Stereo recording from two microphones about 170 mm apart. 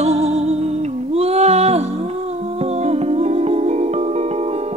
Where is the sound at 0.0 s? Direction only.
40° right (ahead or behind).